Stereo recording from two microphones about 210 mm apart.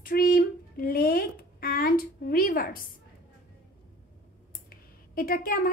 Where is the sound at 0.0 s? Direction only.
45° left (ahead or behind).